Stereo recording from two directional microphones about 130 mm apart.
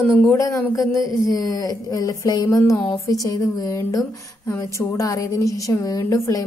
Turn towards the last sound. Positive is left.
turn(degrees=20)  # may be behind; listen again after turning